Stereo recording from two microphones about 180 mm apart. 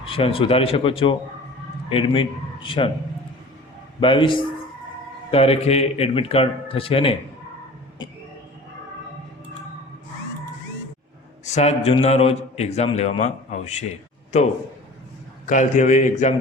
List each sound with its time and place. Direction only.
0.1 s a man's voice: 30° left (ahead or behind)
4.0 s a man's voice: 30° left (ahead or behind)
11.4 s a man's voice: 40° left (ahead or behind)
15.4 s a man's voice: 45° left (ahead or behind)